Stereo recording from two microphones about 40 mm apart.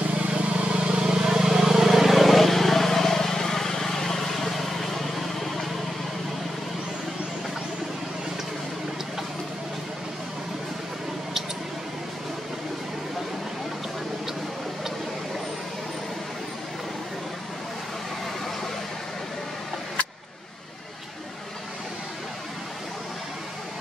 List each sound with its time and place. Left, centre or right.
0.3 s vehicle: right
0.7 s vehicle: right; by 5.7 s centre